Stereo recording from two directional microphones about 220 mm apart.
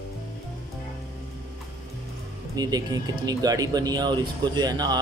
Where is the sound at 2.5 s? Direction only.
15° right (ahead or behind).